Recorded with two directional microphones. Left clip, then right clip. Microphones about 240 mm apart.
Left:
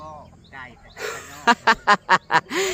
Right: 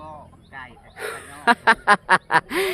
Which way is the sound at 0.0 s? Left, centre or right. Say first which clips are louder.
Even; centre.